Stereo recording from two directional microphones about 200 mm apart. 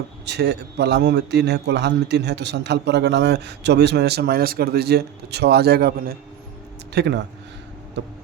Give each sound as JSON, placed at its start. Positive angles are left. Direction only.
{"t": 0.3, "sound": "a man's voice", "side_deg": -60}